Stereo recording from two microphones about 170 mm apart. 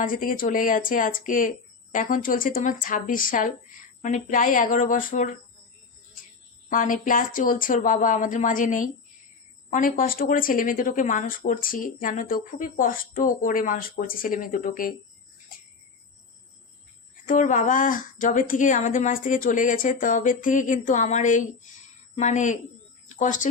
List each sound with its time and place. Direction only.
0.0 s speech: 55° left (ahead or behind)
6.7 s speech: 50° left (ahead or behind)
17.2 s speech: 50° left (ahead or behind)